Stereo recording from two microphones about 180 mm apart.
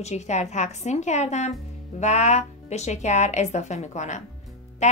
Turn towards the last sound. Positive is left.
turn(degrees=40)  # may be behind; listen again after turning